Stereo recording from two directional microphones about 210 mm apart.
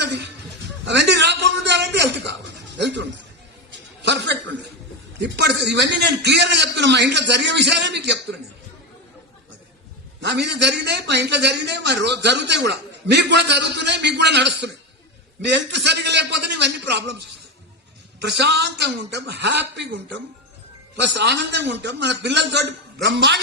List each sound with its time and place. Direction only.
0.0 s music: 55° right (ahead or behind)
0.9 s a sound: 55° right (ahead or behind)
2.7 s a man's voice: 55° right (ahead or behind)
4.0 s chuckle: 55° right (ahead or behind)
5.2 s a man's voice: 55° right (ahead or behind)
10.2 s a man's voice: 55° right (ahead or behind)
18.2 s a man's voice: 55° right (ahead or behind)